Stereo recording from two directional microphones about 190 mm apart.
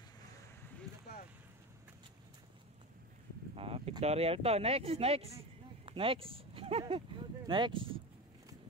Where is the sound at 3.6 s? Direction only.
30° right (ahead or behind).